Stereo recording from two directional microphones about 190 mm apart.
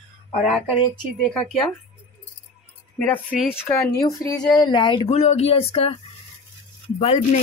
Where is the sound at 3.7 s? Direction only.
15° left (ahead or behind); by 5.9 s 30° left (ahead or behind).